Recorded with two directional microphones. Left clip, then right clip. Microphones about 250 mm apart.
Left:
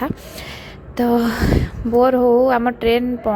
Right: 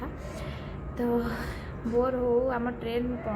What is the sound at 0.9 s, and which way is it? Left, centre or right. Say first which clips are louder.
Speech: left 11 dB; left.